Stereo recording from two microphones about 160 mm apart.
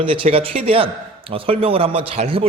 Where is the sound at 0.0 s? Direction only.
35° right (ahead or behind).